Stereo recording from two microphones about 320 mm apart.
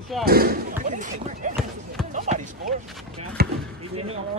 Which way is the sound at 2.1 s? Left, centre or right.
Right.